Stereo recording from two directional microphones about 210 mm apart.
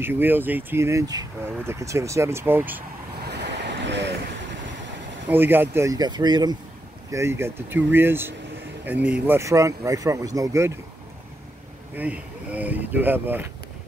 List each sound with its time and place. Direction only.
0.0 s speech: 10° right (ahead or behind)
3.3 s waves: 55° right (ahead or behind)
5.3 s speech: 10° right (ahead or behind)
11.9 s speech: 5° right (ahead or behind)